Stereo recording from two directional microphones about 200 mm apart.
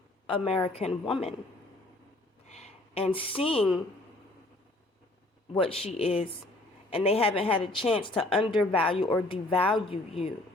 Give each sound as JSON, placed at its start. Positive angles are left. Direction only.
{"t": 0.3, "sound": "a woman's voice", "side_deg": 30}
{"t": 2.5, "sound": "a sound", "side_deg": 30}
{"t": 5.5, "sound": "a woman's voice", "side_deg": 30}